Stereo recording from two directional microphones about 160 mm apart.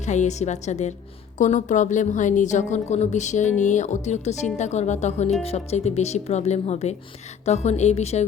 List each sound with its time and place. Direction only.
0.0 s a woman's voice: 45° left (ahead or behind)